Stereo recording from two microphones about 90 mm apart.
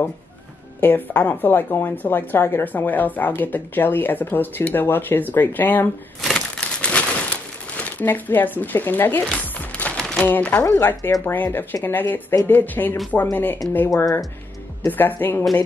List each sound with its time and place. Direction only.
0.7 s speech: 20° left (ahead or behind)
6.2 s crumpling: 5° left (ahead or behind)
10.2 s speech: 20° left (ahead or behind)
14.9 s speech: 20° left (ahead or behind)